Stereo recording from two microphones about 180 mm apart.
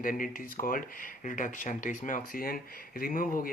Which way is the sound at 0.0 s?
50° left (ahead or behind).